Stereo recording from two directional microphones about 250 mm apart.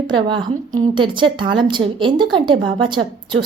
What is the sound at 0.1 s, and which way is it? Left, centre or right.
A woman's voice, centre.